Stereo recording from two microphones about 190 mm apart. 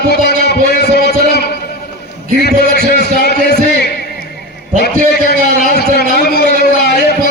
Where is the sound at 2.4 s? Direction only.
60° left (ahead or behind).